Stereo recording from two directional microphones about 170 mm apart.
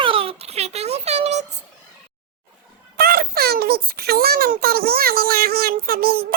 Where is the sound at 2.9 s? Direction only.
60° right (ahead or behind).